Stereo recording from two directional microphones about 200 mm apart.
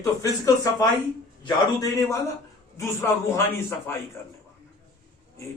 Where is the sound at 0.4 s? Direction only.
15° left (ahead or behind).